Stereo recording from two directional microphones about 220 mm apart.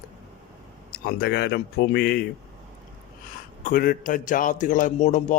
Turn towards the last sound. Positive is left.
turn(degrees=35)  # may be behind; listen again after turning